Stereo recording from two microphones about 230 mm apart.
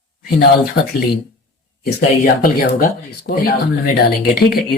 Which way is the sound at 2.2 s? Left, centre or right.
Left.